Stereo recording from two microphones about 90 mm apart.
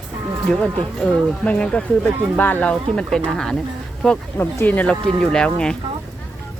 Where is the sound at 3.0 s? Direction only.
5° left (ahead or behind).